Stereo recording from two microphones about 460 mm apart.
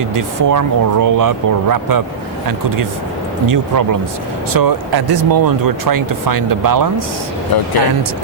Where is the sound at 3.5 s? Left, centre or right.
Right.